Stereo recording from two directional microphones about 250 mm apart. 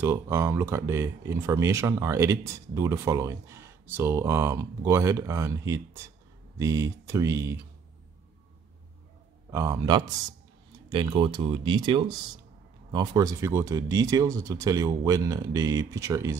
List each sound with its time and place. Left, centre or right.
0.0 s speech: centre
9.5 s speech: centre